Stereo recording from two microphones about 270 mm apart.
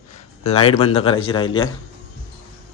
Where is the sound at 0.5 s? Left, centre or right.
Left.